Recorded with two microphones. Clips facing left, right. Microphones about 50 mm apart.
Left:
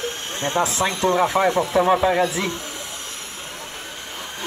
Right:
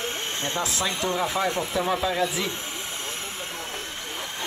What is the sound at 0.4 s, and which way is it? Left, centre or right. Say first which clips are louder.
Speech: left 8 dB; left.